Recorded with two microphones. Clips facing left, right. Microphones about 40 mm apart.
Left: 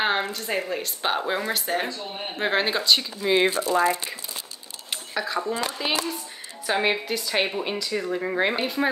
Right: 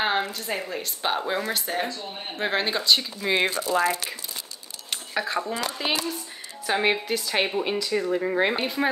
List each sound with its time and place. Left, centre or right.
0.0 s speech: centre
3.4 s speech: left
5.1 s speech: centre
5.4 s speech: centre